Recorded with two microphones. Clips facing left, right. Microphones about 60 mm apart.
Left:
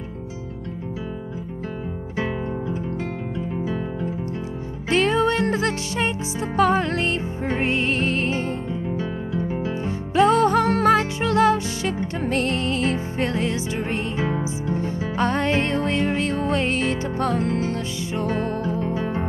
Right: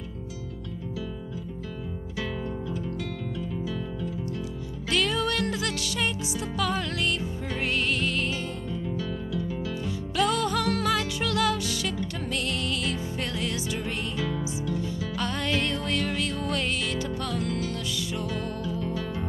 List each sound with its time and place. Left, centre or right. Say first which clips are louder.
2.1 s music: left 6 dB; left
3.5 s guitar: left 6 dB; left
4.8 s music: left 7 dB; left